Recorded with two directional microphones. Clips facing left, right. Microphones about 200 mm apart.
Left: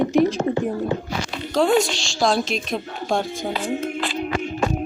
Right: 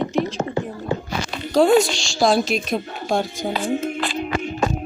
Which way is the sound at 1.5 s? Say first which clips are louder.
Right 3 dB; 5° right (ahead or behind).